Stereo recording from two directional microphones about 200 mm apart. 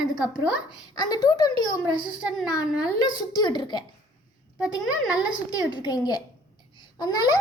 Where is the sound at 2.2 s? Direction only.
5° right (ahead or behind).